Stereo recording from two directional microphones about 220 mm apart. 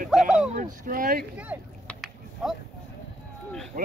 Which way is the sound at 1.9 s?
Centre (ahead or behind).